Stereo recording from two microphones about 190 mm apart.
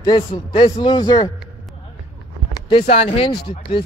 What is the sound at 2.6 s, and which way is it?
Speech, 30° left (ahead or behind).